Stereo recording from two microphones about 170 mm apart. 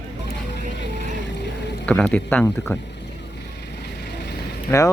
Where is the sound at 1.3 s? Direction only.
90° left.